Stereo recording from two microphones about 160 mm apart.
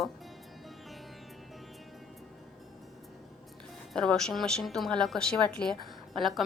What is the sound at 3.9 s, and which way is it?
A woman's voice, 5° left (ahead or behind).